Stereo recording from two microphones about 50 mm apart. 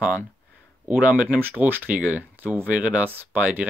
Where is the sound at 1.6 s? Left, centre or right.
Right.